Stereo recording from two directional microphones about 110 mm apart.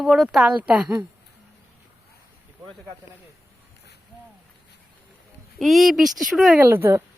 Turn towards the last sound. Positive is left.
turn(degrees=-25)  # may be behind; listen again after turning